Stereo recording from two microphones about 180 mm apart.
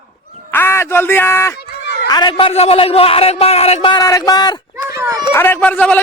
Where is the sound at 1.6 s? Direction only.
65° left (ahead or behind).